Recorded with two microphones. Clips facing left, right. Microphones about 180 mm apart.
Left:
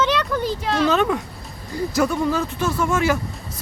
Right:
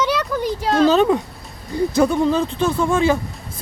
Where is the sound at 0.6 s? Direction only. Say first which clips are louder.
Right 6 dB; 40° right (ahead or behind).